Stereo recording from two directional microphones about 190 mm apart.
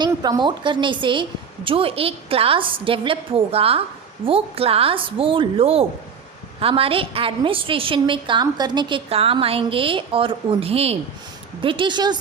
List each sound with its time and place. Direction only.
0.0 s a woman's voice: 20° right (ahead or behind)